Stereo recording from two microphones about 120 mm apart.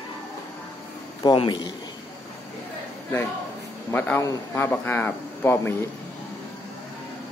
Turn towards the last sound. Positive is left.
turn(degrees=20)  # may be behind; listen again after turning